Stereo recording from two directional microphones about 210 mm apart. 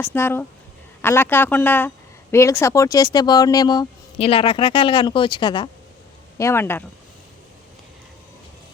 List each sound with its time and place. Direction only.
0.0 s a man's voice: 10° left (ahead or behind)